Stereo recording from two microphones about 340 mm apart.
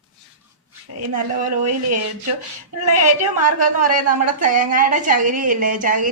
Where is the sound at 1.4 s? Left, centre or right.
Right.